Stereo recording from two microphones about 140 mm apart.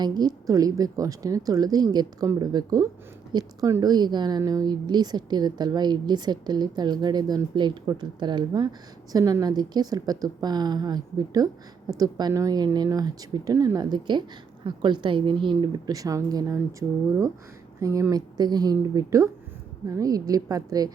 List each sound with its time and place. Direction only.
0.0 s a woman's voice: 30° right (ahead or behind)
17.7 s speech: 20° right (ahead or behind)